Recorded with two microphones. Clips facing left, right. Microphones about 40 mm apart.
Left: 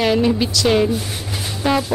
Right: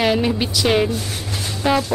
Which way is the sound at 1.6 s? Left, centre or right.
Centre.